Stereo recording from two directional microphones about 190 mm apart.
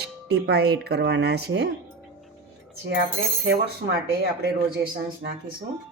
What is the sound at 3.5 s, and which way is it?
Speech, 60° right (ahead or behind).